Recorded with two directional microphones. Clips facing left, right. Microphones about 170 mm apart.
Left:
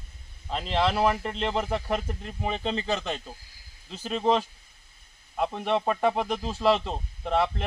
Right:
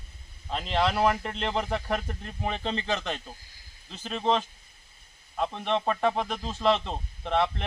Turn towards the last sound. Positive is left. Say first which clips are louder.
# left 1 dB
turn(degrees=5)  # may be behind; listen again after turning